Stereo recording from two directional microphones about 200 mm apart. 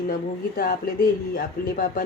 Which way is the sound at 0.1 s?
45° left (ahead or behind).